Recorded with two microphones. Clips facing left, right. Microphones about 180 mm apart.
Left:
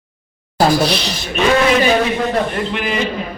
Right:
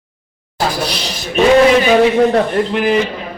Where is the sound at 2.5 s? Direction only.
35° right (ahead or behind).